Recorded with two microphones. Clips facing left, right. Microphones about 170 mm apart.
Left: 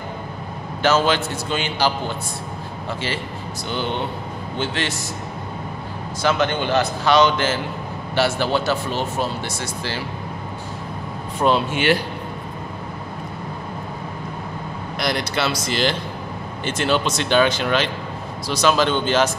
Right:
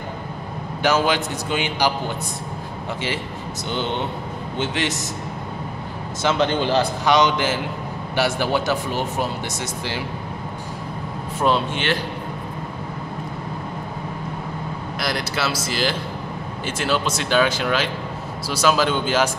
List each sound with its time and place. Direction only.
0.8 s speech: 15° right (ahead or behind)
3.7 s a man's voice: 20° right (ahead or behind)
6.2 s a man's voice: 30° right (ahead or behind)
7.1 s speech: 15° right (ahead or behind)
11.3 s speech: centre (ahead or behind)
15.0 s speech: centre (ahead or behind)